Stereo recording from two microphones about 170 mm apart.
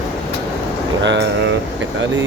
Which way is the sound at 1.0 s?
90° right.